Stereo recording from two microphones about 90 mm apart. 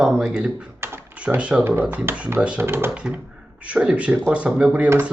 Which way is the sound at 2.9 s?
10° right (ahead or behind).